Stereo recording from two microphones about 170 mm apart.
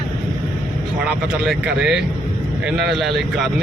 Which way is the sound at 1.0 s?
5° right (ahead or behind).